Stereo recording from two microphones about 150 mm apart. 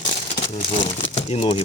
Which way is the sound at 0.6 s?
40° left (ahead or behind).